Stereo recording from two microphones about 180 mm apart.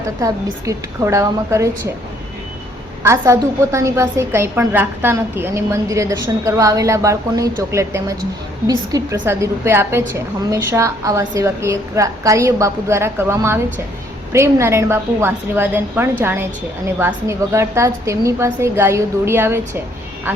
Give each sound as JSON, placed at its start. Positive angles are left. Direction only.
{"t": 0.2, "sound": "a woman's voice", "side_deg": -20}
{"t": 3.0, "sound": "a woman's voice", "side_deg": -15}